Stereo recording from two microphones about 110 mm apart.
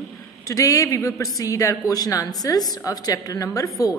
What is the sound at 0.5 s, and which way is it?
A woman's voice, 30° left (ahead or behind).